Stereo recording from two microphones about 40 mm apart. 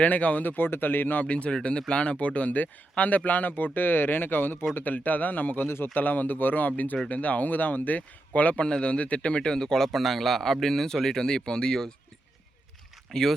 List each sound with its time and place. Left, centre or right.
0.0 s speech: left
0.4 s speech: left
1.2 s speech: left
5.6 s speech: left
5.9 s speech: left
8.6 s a man's voice: left
13.1 s a man's voice: centre